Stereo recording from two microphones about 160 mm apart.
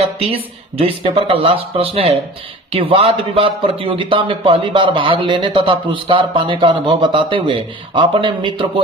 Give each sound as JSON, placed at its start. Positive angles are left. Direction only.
{"t": 0.2, "sound": "a man's voice", "side_deg": -35}